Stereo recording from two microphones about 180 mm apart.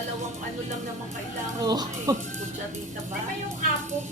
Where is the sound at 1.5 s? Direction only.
20° right (ahead or behind).